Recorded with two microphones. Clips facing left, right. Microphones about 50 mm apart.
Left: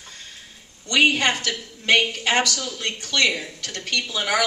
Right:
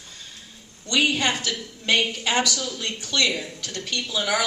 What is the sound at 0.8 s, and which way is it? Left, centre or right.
A woman's voice, left.